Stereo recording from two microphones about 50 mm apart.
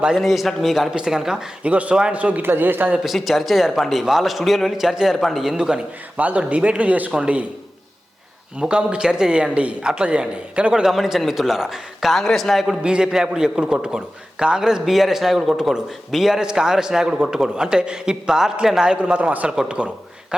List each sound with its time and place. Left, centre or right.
0.2 s a man's voice: centre
0.9 s a man's voice: centre
1.6 s speech: right
2.4 s speech: right
3.2 s a man's voice: centre
5.5 s a man's voice: centre
6.1 s speech: right
8.5 s a man's voice: right
10.9 s a man's voice: centre
12.2 s a man's voice: centre
12.8 s a man's voice: centre
19.1 s speech: right
19.5 s a man's voice: centre